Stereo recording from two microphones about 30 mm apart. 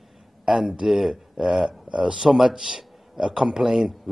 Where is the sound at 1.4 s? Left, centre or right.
Right.